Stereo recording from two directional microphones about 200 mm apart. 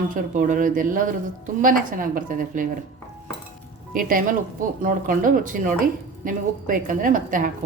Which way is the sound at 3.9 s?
45° right (ahead or behind).